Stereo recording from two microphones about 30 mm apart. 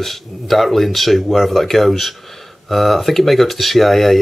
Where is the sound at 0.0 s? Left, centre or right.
Centre.